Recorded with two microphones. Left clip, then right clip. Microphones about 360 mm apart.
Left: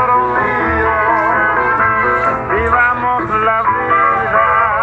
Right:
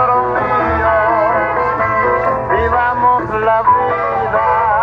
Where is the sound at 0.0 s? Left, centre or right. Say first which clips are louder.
Left 1 dB; right.